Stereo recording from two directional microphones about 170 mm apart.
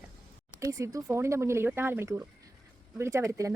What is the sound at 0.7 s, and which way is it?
Speech, 20° right (ahead or behind).